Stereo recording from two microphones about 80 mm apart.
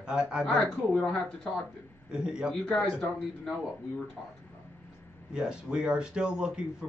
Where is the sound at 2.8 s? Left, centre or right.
Centre.